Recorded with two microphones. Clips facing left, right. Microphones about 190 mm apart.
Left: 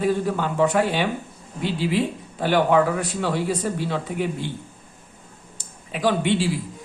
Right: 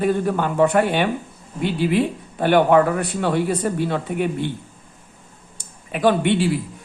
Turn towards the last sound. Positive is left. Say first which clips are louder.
# right 3 dB
turn(degrees=-60)  # may be behind; listen again after turning